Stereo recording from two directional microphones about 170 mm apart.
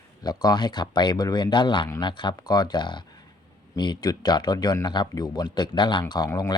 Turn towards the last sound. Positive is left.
turn(degrees=20)  # may be behind; listen again after turning